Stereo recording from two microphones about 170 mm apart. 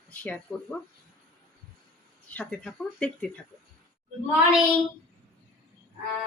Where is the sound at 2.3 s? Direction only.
10° left (ahead or behind).